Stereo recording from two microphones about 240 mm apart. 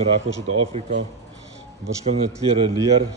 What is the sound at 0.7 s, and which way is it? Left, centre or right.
Speech, right.